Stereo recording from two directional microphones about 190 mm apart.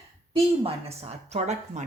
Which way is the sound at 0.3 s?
30° right (ahead or behind).